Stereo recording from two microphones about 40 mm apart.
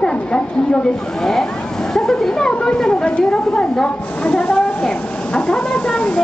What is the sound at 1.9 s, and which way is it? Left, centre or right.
Speech, centre.